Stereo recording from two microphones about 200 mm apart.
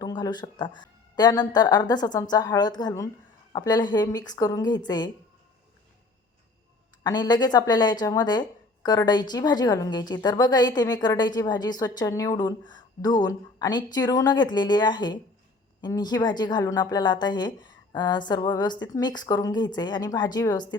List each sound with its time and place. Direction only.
0.0 s speech: 20° left (ahead or behind)
7.0 s speech: 20° left (ahead or behind)